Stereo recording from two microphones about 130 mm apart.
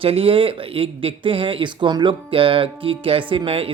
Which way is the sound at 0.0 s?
45° right (ahead or behind).